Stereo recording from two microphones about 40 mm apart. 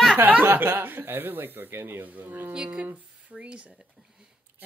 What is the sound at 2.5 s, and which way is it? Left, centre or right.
Speech, right.